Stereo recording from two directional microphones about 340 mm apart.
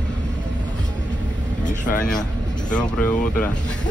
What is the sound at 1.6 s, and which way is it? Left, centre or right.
Speech, left.